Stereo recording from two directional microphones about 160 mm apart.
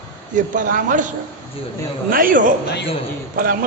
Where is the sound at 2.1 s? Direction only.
60° right (ahead or behind).